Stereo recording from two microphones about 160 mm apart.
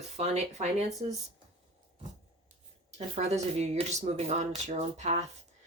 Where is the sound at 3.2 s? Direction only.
45° right (ahead or behind).